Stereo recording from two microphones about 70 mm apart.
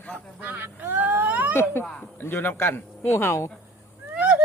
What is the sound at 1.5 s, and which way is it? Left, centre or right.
Speech, left.